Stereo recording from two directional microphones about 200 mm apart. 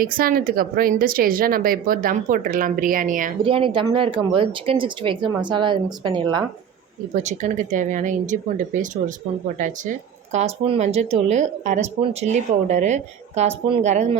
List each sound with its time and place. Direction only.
0.0 s speech: 45° right (ahead or behind)
3.4 s speech: 25° right (ahead or behind)
7.1 s speech: 35° right (ahead or behind)